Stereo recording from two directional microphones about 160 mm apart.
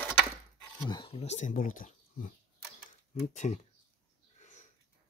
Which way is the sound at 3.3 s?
45° left (ahead or behind).